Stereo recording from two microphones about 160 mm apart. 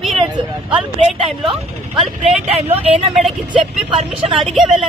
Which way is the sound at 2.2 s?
40° right (ahead or behind).